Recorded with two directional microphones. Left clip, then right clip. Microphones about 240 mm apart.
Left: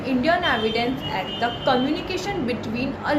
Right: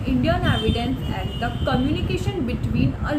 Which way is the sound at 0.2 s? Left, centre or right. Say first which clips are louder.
Left 3 dB; centre.